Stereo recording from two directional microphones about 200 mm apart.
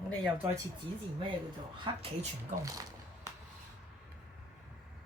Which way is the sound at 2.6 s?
15° right (ahead or behind).